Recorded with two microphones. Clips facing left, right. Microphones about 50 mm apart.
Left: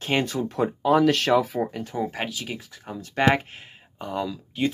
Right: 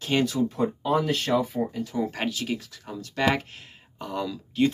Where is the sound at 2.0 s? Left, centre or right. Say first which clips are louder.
Even; centre.